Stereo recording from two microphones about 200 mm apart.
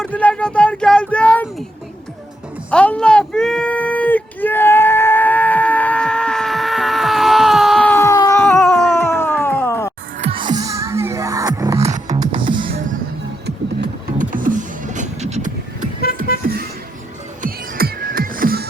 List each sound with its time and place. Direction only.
0.0 s speech: 5° left (ahead or behind)
2.6 s a sound: 5° left (ahead or behind)
10.2 s music: 30° right (ahead or behind)
14.2 s music: 40° right (ahead or behind)
16.4 s music: 50° right (ahead or behind)